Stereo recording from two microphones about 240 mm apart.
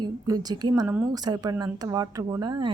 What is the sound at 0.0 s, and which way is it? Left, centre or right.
Speech, centre.